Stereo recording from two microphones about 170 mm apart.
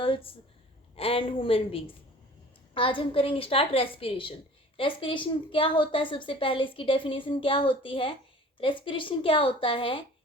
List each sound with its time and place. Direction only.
0.0 s a woman's voice: 30° left (ahead or behind)